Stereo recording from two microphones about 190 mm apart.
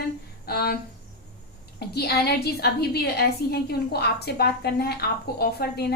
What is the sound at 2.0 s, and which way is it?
A woman's voice, 55° left (ahead or behind).